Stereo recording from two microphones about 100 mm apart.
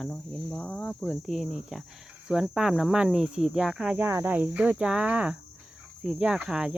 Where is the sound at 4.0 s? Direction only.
25° right (ahead or behind).